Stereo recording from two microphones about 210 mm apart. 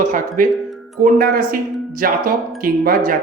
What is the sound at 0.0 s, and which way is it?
Speech, 40° right (ahead or behind).